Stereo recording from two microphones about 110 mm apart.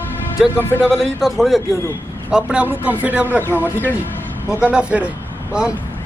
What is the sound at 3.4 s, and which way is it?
Speech, 20° left (ahead or behind).